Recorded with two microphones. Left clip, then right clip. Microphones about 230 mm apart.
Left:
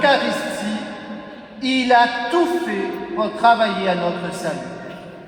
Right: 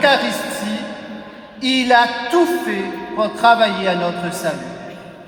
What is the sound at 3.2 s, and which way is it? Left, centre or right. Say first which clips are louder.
A man's voice: right 2 dB; right.